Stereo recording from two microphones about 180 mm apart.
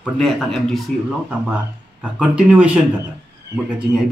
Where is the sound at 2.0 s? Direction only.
5° right (ahead or behind).